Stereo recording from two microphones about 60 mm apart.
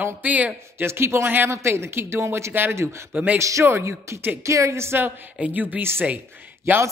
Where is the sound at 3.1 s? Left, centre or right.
Right.